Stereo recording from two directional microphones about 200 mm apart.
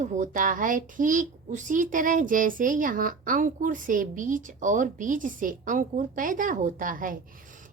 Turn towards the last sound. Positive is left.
turn(degrees=-40)  # may be behind; listen again after turning